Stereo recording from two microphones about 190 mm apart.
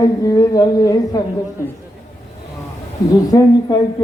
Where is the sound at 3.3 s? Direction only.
20° left (ahead or behind).